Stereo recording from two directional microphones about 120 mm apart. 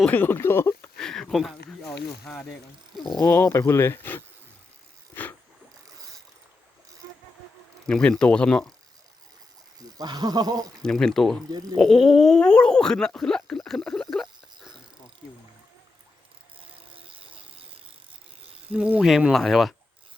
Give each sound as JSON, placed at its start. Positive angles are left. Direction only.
{"t": 0.0, "sound": "speech", "side_deg": 15}
{"t": 0.9, "sound": "a sound", "side_deg": 5}
{"t": 2.2, "sound": "speech", "side_deg": 5}
{"t": 3.2, "sound": "speech", "side_deg": 20}
{"t": 7.9, "sound": "speech", "side_deg": 5}
{"t": 10.0, "sound": "speech", "side_deg": -35}
{"t": 10.8, "sound": "speech", "side_deg": 5}
{"t": 11.5, "sound": "speech", "side_deg": -30}
{"t": 11.8, "sound": "speech", "side_deg": 0}
{"t": 16.6, "sound": "a sound", "side_deg": -50}
{"t": 18.7, "sound": "speech", "side_deg": -10}